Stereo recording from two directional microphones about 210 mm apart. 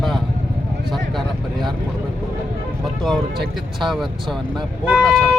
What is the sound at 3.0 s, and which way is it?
Speech, centre (ahead or behind).